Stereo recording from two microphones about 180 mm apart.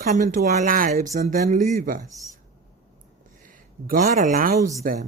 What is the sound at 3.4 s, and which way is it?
A woman's voice, 50° right (ahead or behind).